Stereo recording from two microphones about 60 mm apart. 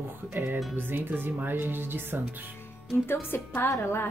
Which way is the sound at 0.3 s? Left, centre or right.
Right.